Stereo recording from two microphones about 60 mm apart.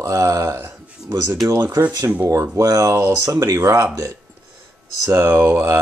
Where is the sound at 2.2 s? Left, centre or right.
Right.